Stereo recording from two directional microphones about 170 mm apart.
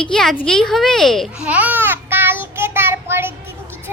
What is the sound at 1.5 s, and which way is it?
Child singing, 10° right (ahead or behind).